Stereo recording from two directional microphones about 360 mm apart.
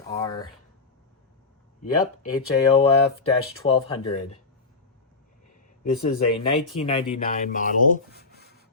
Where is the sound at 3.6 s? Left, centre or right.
Centre.